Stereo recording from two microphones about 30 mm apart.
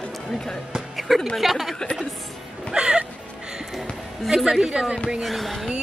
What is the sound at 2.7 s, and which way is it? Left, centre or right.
Music, right.